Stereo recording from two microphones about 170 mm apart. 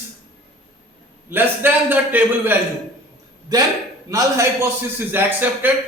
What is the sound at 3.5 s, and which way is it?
A man's voice, 20° right (ahead or behind).